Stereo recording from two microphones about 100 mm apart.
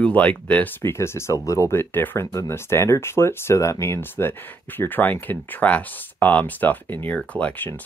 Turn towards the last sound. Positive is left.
turn(degrees=15)  # may be behind; listen again after turning